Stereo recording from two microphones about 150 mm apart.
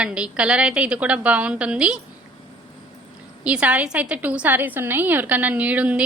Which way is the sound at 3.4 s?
10° right (ahead or behind).